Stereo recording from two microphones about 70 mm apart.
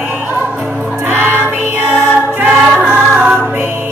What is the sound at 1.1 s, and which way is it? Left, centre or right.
Music, right.